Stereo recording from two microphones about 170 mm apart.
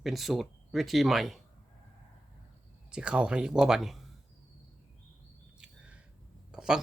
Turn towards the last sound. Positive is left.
turn(degrees=-5)  # may be behind; listen again after turning